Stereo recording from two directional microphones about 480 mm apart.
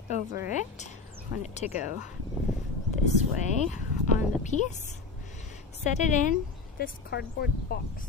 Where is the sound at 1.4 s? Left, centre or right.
Centre.